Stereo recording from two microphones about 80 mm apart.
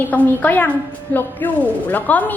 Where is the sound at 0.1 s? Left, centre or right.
Left.